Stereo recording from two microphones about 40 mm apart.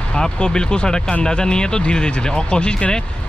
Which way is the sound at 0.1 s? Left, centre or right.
Left.